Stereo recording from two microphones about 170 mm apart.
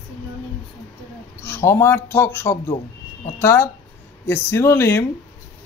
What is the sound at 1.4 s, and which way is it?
Speech, 15° left (ahead or behind).